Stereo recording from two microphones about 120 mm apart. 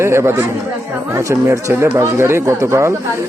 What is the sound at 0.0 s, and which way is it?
Speech, 20° right (ahead or behind).